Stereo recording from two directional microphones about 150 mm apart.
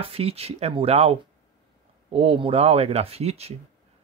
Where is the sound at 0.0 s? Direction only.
40° right (ahead or behind).